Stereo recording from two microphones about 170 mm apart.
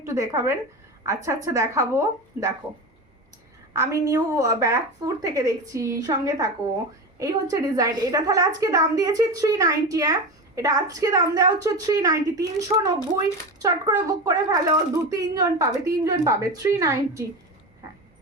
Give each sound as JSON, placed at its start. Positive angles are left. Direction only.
{"t": 0.0, "sound": "a woman's voice", "side_deg": -15}
{"t": 3.7, "sound": "a woman's voice", "side_deg": -20}